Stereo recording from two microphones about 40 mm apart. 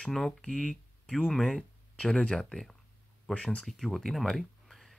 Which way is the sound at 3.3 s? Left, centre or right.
Centre.